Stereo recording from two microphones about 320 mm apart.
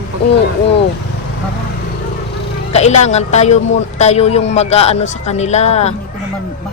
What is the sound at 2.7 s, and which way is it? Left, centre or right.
A man's voice, left.